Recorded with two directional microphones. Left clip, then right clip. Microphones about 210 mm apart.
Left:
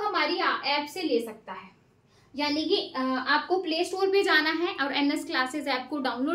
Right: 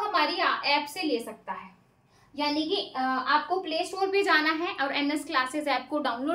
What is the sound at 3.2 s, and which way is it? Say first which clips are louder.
A woman's voice: left 1 dB; 10° left (ahead or behind).